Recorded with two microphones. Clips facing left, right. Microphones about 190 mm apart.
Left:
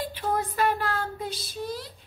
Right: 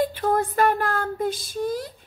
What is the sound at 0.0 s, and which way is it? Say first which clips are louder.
Child singing: right 6 dB; 50° right (ahead or behind).